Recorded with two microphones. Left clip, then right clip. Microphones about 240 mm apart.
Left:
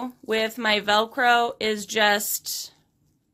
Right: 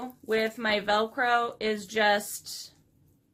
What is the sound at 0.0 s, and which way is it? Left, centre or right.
Speech, left.